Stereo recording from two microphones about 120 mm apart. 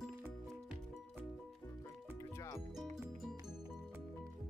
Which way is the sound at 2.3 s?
25° left (ahead or behind).